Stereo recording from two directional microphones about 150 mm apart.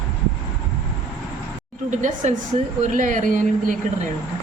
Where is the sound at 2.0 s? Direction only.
55° right (ahead or behind).